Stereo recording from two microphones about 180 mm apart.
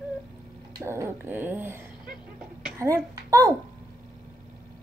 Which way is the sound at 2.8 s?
15° right (ahead or behind).